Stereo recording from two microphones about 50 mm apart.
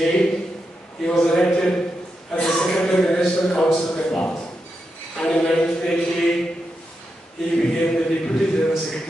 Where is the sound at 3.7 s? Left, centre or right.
Left.